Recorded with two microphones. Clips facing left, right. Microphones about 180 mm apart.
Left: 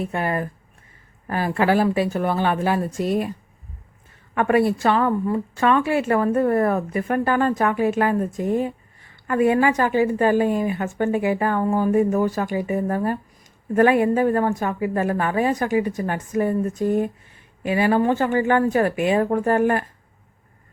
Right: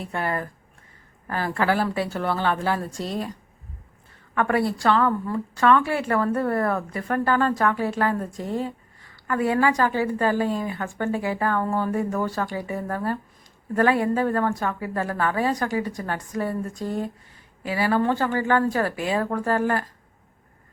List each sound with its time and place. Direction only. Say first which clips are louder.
0.0 s a woman's voice: left 4 dB; 20° left (ahead or behind)
4.4 s a woman's voice: left 4 dB; 20° left (ahead or behind)